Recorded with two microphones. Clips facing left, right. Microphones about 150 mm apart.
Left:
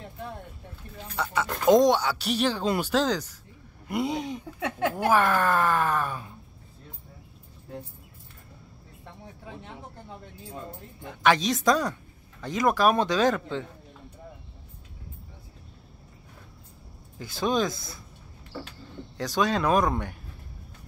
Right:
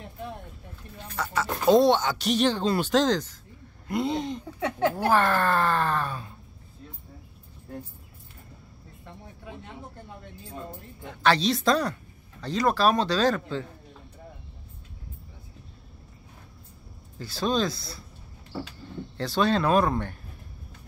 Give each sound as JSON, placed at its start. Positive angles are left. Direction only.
{"t": 1.3, "sound": "speech", "side_deg": 15}
{"t": 11.2, "sound": "speech", "side_deg": 15}
{"t": 17.2, "sound": "speech", "side_deg": 20}
{"t": 19.1, "sound": "speech", "side_deg": 15}